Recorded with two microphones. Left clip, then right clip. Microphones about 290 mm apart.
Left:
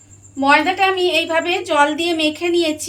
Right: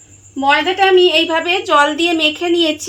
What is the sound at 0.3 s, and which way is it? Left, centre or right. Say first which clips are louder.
A woman's voice: right 1 dB; right.